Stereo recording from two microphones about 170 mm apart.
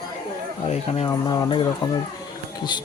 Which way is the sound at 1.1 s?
25° left (ahead or behind).